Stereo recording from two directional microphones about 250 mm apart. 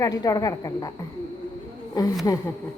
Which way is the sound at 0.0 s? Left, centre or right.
Centre.